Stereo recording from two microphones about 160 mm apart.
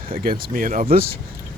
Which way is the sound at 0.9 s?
70° right (ahead or behind).